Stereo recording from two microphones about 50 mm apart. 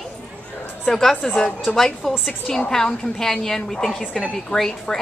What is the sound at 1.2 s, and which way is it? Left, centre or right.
Speech, left.